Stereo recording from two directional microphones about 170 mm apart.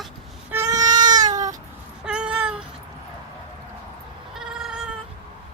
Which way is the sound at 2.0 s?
5° right (ahead or behind).